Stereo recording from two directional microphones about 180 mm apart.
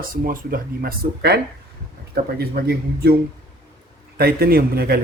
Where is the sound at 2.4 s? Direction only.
60° right (ahead or behind).